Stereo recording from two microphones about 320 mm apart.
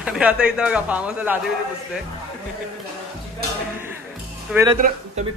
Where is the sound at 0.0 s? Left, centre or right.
Centre.